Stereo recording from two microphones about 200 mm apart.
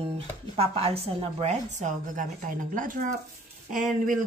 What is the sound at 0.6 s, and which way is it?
A woman's voice, 30° right (ahead or behind).